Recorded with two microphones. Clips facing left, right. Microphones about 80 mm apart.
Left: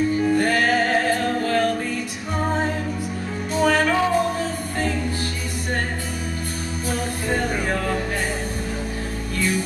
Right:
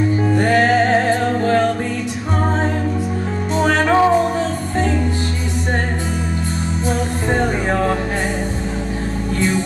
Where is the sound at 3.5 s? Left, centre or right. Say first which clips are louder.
Right 4 dB; right.